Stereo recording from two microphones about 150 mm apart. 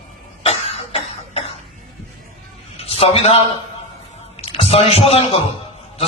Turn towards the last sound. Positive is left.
turn(degrees=40)  # may be behind; listen again after turning